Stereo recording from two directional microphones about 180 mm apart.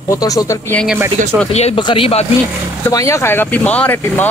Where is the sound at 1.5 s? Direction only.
35° left (ahead or behind).